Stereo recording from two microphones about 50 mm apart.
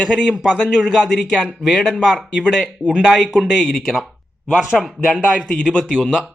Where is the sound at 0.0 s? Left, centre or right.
Centre.